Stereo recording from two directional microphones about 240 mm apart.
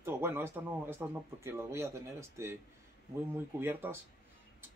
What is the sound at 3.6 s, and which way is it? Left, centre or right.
Speech, centre.